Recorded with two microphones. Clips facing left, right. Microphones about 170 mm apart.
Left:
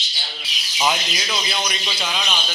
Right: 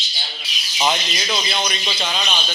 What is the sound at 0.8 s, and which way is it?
A man's voice, 5° left (ahead or behind).